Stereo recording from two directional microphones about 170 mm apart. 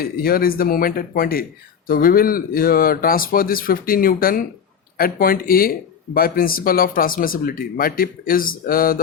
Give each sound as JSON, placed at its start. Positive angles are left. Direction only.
{"t": 0.0, "sound": "speech", "side_deg": 60}